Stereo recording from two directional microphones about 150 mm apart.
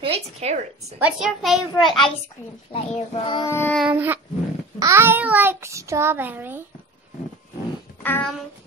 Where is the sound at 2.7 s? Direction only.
40° left (ahead or behind).